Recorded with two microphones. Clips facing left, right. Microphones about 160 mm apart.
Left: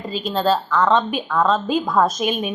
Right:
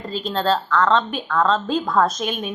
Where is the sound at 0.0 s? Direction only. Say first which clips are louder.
Left 2 dB; 5° left (ahead or behind).